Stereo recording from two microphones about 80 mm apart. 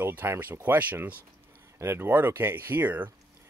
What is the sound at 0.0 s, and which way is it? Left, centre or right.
Speech, right.